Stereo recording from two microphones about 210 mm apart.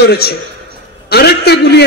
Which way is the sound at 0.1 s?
50° left (ahead or behind).